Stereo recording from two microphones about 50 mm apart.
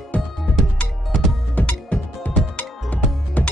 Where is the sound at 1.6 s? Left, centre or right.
Left.